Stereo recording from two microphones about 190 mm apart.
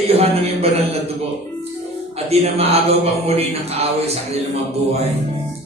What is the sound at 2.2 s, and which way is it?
Speech, 35° right (ahead or behind).